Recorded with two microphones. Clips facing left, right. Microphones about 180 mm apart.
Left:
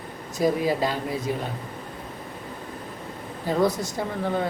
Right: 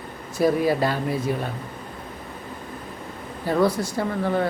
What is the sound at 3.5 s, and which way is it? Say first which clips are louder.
Speech: right 2 dB; 20° left (ahead or behind).